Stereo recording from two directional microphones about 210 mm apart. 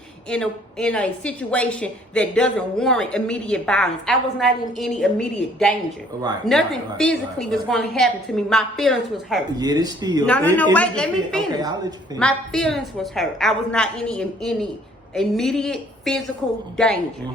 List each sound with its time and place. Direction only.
0.3 s a woman's voice: 5° left (ahead or behind)
9.6 s speech: 20° right (ahead or behind)
10.2 s a woman's voice: 5° left (ahead or behind)